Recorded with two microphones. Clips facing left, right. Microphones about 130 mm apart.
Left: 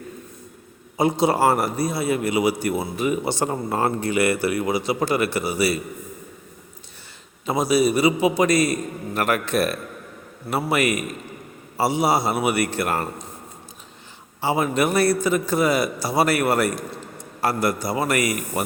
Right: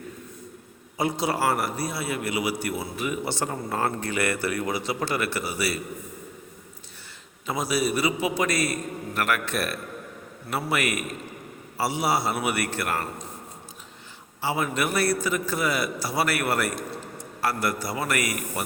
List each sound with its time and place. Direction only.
0.9 s a man's voice: 20° left (ahead or behind)
7.4 s a man's voice: 20° left (ahead or behind)
14.4 s a man's voice: 20° left (ahead or behind)